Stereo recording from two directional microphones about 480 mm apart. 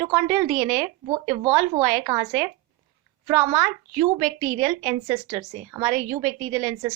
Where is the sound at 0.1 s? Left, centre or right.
Centre.